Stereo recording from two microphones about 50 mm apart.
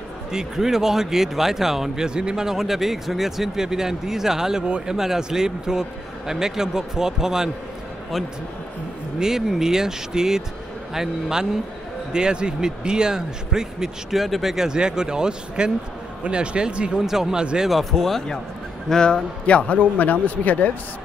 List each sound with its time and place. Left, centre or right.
0.3 s speech: centre
4.6 s speech: right
4.9 s speech: centre
9.2 s speech: centre
17.6 s a man's voice: centre; by 20.7 s left